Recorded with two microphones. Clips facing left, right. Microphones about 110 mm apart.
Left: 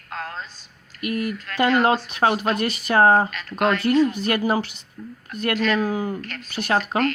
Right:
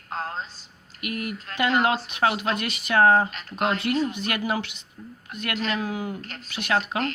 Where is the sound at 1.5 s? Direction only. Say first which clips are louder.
Left 5 dB; 30° right (ahead or behind).